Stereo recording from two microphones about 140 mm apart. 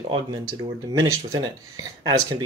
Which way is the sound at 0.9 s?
25° right (ahead or behind).